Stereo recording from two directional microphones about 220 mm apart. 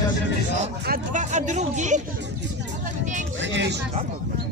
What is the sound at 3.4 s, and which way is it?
Speech, 55° right (ahead or behind).